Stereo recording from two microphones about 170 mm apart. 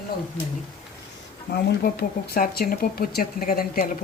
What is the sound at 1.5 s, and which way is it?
Speech, 70° left (ahead or behind).